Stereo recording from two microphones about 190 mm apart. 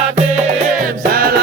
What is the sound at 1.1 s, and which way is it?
Music, 50° right (ahead or behind).